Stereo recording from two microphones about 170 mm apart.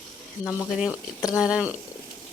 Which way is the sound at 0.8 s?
5° right (ahead or behind).